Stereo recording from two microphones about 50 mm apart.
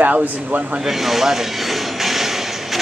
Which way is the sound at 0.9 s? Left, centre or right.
Centre.